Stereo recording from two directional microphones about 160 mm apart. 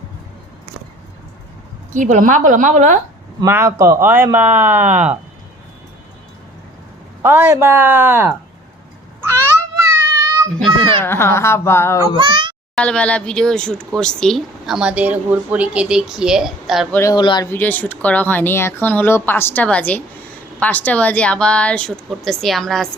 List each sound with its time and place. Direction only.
1.9 s a woman's voice: 50° right (ahead or behind)
3.4 s speech: 15° right (ahead or behind)
7.2 s speech: 15° right (ahead or behind)
9.2 s cat: 15° right (ahead or behind)
11.0 s speech: 15° left (ahead or behind)
12.1 s a child's voice: 30° right (ahead or behind)
12.7 s speech: 5° left (ahead or behind)
16.9 s speech: 20° left (ahead or behind)
17.5 s speech: 10° left (ahead or behind)